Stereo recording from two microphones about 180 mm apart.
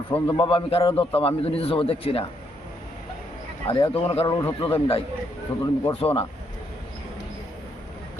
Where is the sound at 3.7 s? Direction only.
30° left (ahead or behind).